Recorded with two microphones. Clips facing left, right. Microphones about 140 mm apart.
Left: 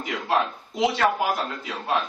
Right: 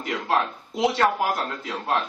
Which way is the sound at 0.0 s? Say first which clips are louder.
Even; centre (ahead or behind).